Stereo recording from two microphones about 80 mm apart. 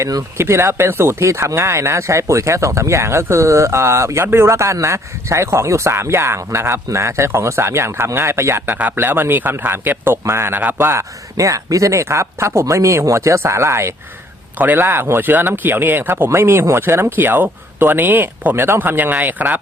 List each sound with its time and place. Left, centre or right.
0.0 s speech: right
0.3 s speech: right
8.6 s speech: right